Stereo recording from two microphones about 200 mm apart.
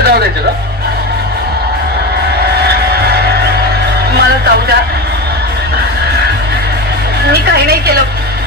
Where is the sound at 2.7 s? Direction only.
55° right (ahead or behind).